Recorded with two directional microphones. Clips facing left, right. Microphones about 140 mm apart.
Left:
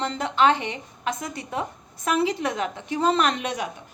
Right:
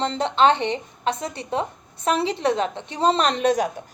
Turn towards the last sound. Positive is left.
turn(degrees=-35)  # may be behind; listen again after turning